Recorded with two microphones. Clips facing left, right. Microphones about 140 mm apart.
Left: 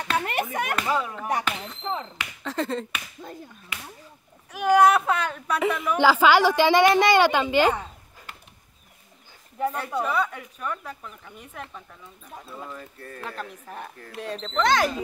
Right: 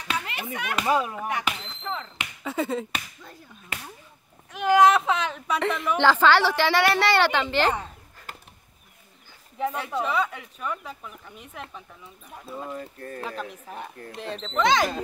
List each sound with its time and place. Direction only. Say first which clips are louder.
0.1 s speech: left 5 dB; 50° left (ahead or behind)
0.8 s speech: right 2 dB; 15° right (ahead or behind)
1.8 s speech: left 3 dB; 25° left (ahead or behind)
2.4 s speech: right 1 dB; 5° right (ahead or behind)
4.5 s speech: even; 5° left (ahead or behind)
8.3 s bird: right 3 dB; 40° right (ahead or behind)
9.6 s speech: left 1 dB; centre (ahead or behind)
13.0 s speech: right 1 dB; 35° right (ahead or behind)
14.1 s speech: left 1 dB; centre (ahead or behind)